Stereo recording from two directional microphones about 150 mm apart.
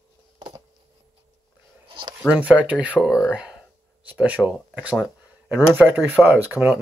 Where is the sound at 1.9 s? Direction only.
35° right (ahead or behind).